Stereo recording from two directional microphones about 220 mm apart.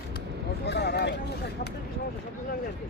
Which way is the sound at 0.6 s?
50° left (ahead or behind).